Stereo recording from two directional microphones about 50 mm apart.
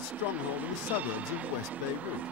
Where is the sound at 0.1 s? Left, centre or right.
Right.